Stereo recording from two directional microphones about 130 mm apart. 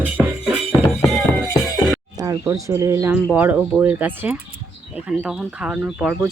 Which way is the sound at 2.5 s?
25° right (ahead or behind).